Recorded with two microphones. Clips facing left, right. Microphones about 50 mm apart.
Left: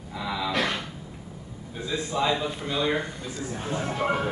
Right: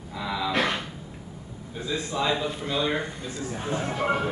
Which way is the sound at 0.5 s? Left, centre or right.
Right.